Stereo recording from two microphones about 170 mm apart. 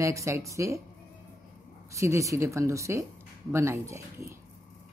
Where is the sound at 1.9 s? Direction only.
15° right (ahead or behind).